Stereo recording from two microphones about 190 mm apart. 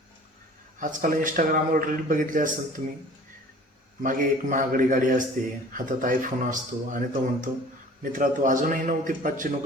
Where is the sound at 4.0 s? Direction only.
45° right (ahead or behind).